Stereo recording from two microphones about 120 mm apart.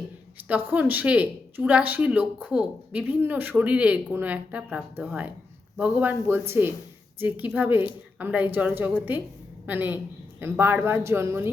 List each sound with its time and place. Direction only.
0.4 s speech: 15° right (ahead or behind)